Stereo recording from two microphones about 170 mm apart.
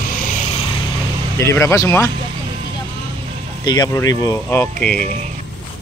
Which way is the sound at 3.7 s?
25° left (ahead or behind).